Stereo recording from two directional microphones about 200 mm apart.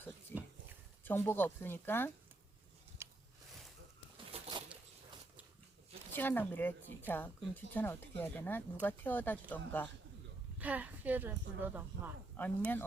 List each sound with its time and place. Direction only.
0.3 s pig: 10° left (ahead or behind)
1.0 s speech: 10° left (ahead or behind)
3.0 s a sound: 15° right (ahead or behind)
4.3 s a sound: 25° right (ahead or behind)
6.1 s speech: 10° left (ahead or behind)
10.6 s speech: 10° right (ahead or behind)
12.4 s speech: 10° left (ahead or behind)